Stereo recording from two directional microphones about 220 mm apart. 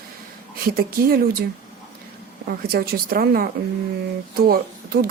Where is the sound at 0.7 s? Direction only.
40° right (ahead or behind).